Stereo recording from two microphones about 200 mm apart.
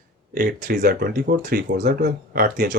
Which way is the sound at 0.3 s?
45° right (ahead or behind).